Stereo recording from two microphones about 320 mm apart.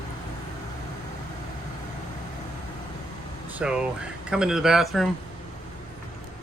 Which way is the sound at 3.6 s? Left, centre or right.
Centre.